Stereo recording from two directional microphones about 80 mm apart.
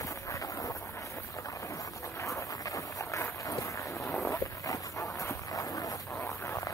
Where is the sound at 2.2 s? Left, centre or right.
Left.